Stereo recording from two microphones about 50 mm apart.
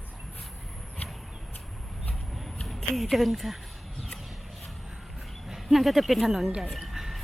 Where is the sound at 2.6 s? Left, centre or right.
Centre.